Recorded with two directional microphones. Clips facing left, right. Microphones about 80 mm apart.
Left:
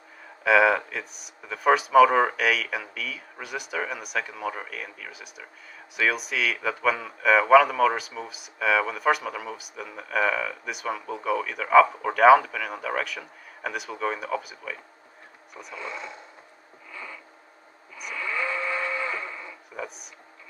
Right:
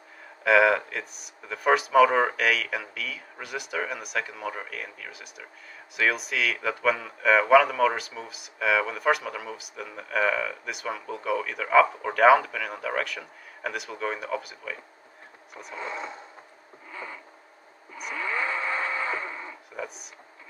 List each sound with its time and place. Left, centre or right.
0.4 s speech: centre
15.7 s speech: right
16.9 s a sound: right
19.7 s speech: centre